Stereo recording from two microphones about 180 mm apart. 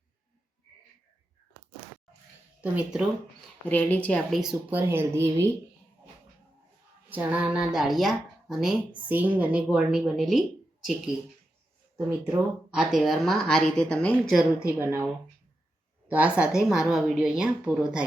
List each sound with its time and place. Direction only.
2.6 s a woman's voice: 5° right (ahead or behind)
3.7 s speech: 10° left (ahead or behind); by 5.5 s 15° right (ahead or behind)
7.1 s a woman's voice: 10° right (ahead or behind)
11.9 s speech: 20° right (ahead or behind)
12.7 s speech: 5° right (ahead or behind)
14.7 s a woman's voice: 10° right (ahead or behind)
16.0 s a woman's voice: 10° right (ahead or behind)